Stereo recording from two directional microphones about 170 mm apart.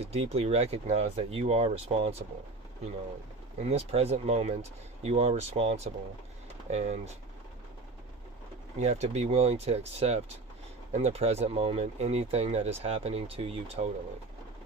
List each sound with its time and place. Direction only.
0.0 s speech: 35° right (ahead or behind)
3.6 s speech: 35° right (ahead or behind)
8.7 s speech: 40° right (ahead or behind)